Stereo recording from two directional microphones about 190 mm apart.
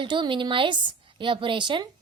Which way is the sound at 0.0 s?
25° right (ahead or behind).